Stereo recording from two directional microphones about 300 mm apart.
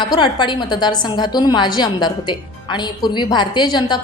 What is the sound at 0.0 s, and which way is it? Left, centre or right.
A woman's voice, centre.